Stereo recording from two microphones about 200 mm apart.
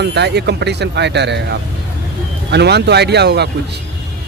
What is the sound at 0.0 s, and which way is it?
Speech, 55° right (ahead or behind).